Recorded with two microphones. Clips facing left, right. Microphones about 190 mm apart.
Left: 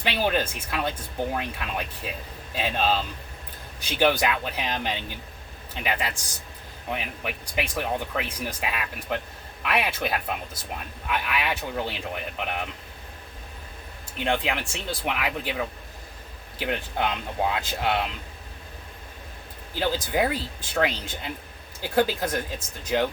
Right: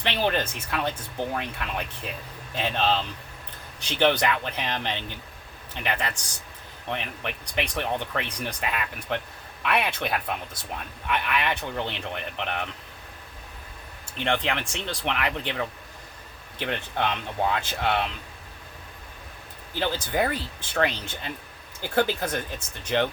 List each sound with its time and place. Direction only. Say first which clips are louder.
0.0 s speech: left 1 dB; 10° left (ahead or behind)
14.2 s speech: even; 10° left (ahead or behind)
19.8 s speech: left 1 dB; 10° left (ahead or behind)